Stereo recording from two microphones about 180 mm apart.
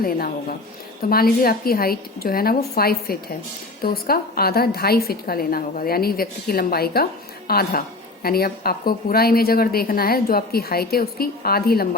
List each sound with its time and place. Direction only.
1.1 s a woman's voice: 55° left (ahead or behind)